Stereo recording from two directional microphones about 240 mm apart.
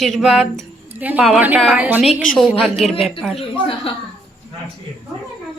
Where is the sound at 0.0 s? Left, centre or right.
Centre.